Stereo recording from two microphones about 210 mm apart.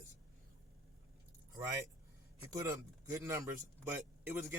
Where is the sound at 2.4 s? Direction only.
15° right (ahead or behind).